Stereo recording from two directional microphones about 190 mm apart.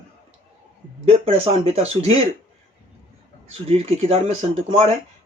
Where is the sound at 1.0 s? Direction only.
30° right (ahead or behind).